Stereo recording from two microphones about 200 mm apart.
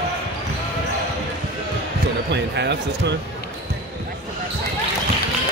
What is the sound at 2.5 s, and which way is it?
Speech, 60° right (ahead or behind).